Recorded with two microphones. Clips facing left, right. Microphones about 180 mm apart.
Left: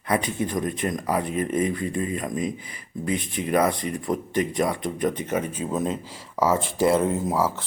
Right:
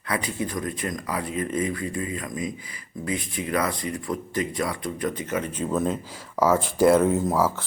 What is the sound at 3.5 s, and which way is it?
Speech, 20° left (ahead or behind).